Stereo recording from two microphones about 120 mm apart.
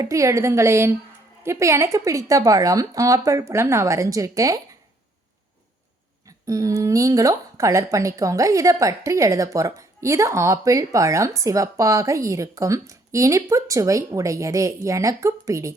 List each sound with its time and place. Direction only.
0.0 s a woman's voice: 25° right (ahead or behind)
6.2 s a woman's voice: 25° right (ahead or behind)